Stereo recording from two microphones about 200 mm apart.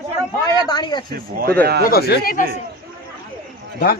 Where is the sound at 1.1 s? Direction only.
50° right (ahead or behind).